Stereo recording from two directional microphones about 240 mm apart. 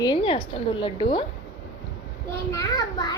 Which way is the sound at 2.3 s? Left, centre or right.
Centre.